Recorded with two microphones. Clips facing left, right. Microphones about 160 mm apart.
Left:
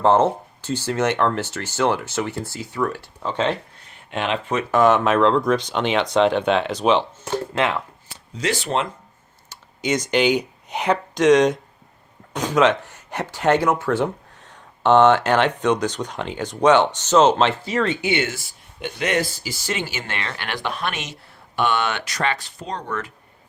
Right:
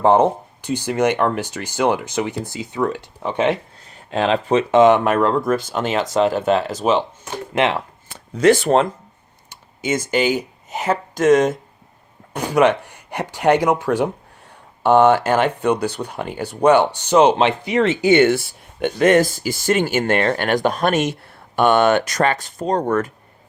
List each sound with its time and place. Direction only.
0.0 s speech: 15° right (ahead or behind)
3.9 s speech: 35° right (ahead or behind)
4.7 s speech: 20° right (ahead or behind)
4.9 s speech: 10° right (ahead or behind)
7.5 s speech: 25° right (ahead or behind)
8.1 s speech: 55° right (ahead or behind)
9.5 s speech: 5° right (ahead or behind)
18.0 s speech: 50° right (ahead or behind)